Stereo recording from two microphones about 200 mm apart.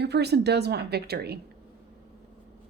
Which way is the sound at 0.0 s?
55° right (ahead or behind).